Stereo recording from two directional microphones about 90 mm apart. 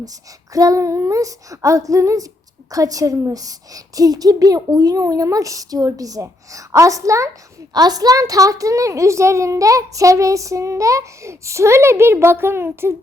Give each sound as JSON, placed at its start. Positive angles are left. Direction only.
{"t": 0.0, "sound": "a child's voice", "side_deg": -40}
{"t": 7.7, "sound": "a child's voice", "side_deg": -45}